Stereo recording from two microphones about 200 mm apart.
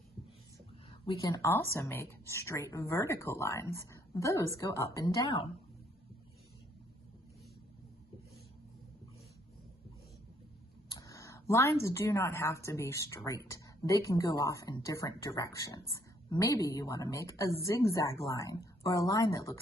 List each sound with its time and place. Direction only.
1.0 s speech: 20° left (ahead or behind)
10.9 s a sound: 15° left (ahead or behind)
11.8 s speech: 15° left (ahead or behind)